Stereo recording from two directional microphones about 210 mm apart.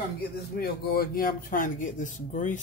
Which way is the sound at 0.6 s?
45° left (ahead or behind).